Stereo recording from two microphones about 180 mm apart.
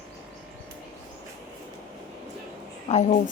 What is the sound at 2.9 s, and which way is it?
Speech, 40° left (ahead or behind).